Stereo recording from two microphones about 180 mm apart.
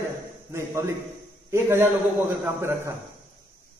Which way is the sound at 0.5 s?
15° right (ahead or behind).